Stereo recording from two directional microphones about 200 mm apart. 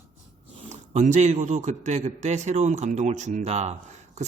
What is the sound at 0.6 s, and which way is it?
Speech, 35° right (ahead or behind).